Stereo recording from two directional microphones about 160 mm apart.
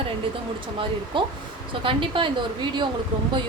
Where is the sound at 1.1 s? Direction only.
30° right (ahead or behind).